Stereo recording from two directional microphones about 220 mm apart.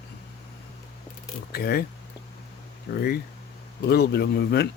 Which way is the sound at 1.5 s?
45° left (ahead or behind).